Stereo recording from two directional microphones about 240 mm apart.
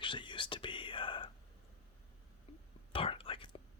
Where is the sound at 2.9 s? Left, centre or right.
Left.